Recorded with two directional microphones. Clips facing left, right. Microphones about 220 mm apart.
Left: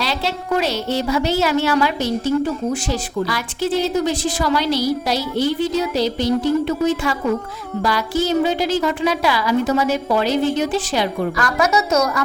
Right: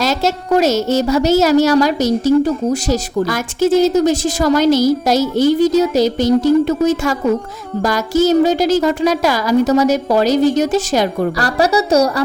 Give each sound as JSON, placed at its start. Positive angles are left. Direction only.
{"t": 0.0, "sound": "a woman's voice", "side_deg": -45}